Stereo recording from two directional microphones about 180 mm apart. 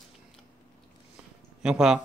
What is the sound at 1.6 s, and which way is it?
Speech, 5° right (ahead or behind).